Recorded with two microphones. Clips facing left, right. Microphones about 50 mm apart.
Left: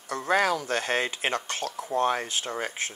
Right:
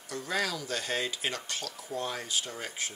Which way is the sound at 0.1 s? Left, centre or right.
Left.